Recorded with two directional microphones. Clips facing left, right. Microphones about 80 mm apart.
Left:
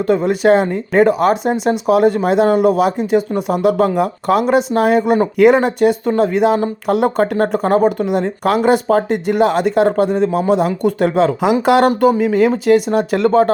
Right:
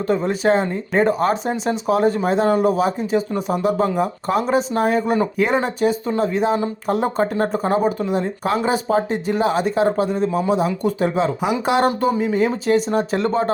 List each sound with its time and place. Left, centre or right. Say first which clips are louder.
0.3 s speech: left 6 dB; left
7.5 s speech: left 5 dB; left
12.6 s speech: left 5 dB; left